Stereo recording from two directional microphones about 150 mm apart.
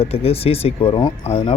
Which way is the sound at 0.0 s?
40° left (ahead or behind).